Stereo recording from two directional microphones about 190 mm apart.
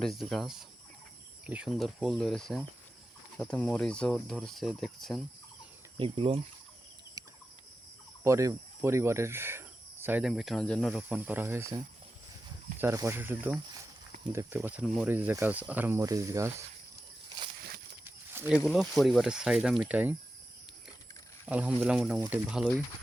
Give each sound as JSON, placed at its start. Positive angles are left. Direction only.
{"t": 0.0, "sound": "speech", "side_deg": 0}
{"t": 6.0, "sound": "speech", "side_deg": -30}
{"t": 7.2, "sound": "fowl", "side_deg": -20}
{"t": 8.2, "sound": "speech", "side_deg": -15}
{"t": 12.8, "sound": "speech", "side_deg": -15}
{"t": 18.0, "sound": "speech", "side_deg": -10}
{"t": 21.4, "sound": "speech", "side_deg": -5}